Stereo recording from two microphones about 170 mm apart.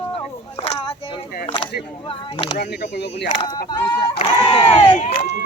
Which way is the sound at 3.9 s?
30° left (ahead or behind).